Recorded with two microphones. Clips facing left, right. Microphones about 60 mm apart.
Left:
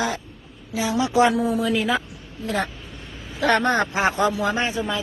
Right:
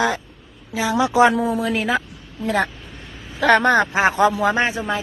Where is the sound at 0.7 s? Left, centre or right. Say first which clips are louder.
Right 3 dB; right.